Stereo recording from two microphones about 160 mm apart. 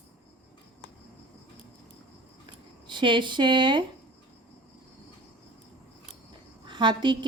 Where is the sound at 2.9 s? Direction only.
30° right (ahead or behind).